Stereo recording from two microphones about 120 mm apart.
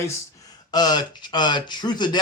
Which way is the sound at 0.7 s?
35° left (ahead or behind).